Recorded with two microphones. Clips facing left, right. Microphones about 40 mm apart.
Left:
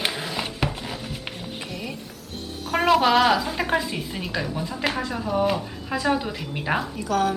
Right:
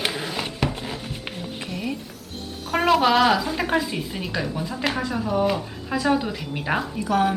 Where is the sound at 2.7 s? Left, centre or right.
Centre.